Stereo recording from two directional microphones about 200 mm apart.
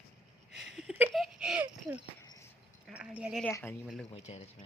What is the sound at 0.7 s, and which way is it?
Speech, centre (ahead or behind).